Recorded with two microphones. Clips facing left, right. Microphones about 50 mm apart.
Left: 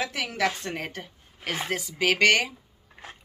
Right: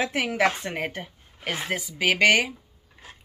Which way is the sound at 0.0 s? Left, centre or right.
Right.